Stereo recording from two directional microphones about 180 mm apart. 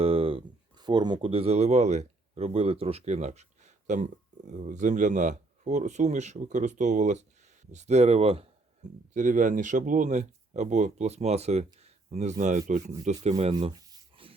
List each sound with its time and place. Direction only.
0.0 s speech: 30° right (ahead or behind)
9.1 s speech: 45° right (ahead or behind)
13.3 s rub: 30° right (ahead or behind)